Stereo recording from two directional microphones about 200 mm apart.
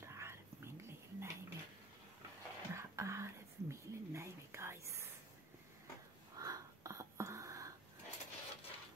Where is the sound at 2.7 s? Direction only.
15° right (ahead or behind).